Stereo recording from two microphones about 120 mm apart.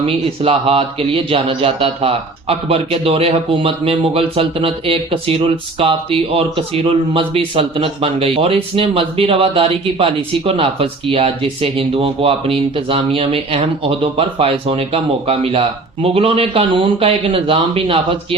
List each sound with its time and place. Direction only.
0.0 s speech: 50° right (ahead or behind)